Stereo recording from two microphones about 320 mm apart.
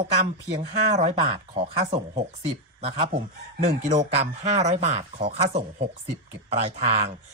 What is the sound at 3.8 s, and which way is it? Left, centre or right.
Speech, right.